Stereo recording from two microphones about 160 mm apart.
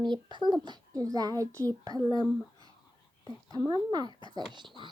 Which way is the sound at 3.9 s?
25° right (ahead or behind).